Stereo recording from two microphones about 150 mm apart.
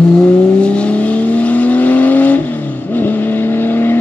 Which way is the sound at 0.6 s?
5° left (ahead or behind).